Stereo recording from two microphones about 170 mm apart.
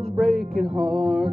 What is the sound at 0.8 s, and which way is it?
Music, centre (ahead or behind).